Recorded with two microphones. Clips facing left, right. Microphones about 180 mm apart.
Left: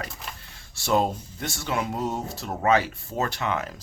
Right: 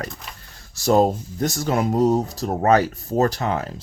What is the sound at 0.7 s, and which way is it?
Speech, 40° right (ahead or behind).